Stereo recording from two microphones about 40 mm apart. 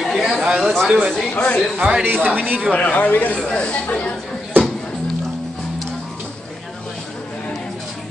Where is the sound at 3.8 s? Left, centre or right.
Left.